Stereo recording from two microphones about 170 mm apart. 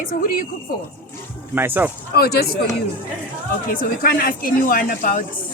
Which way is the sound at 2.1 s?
65° left (ahead or behind).